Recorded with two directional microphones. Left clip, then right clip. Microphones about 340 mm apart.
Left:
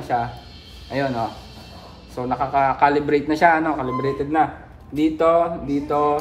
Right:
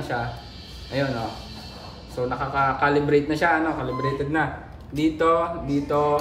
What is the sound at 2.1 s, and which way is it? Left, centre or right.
A man's voice, centre.